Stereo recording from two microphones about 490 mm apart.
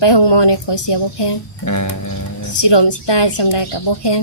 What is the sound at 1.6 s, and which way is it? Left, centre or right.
Music, left.